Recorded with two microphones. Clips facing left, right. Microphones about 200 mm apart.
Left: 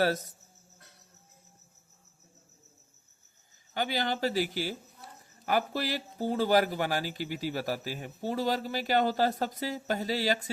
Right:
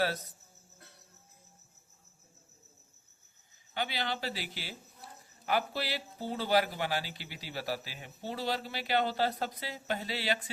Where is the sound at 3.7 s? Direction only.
45° left (ahead or behind).